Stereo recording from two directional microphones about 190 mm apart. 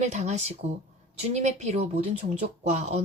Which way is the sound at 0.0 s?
35° right (ahead or behind).